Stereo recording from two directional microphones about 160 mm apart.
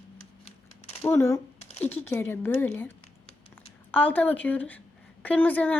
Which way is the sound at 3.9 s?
10° left (ahead or behind).